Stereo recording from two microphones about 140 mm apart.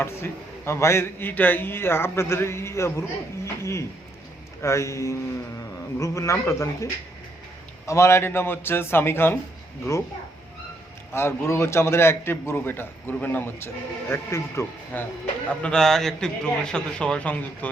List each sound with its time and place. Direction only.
0.0 s a man's voice: 20° left (ahead or behind)
7.9 s a man's voice: 20° left (ahead or behind)
11.1 s a man's voice: 15° left (ahead or behind)
15.4 s a man's voice: 5° left (ahead or behind)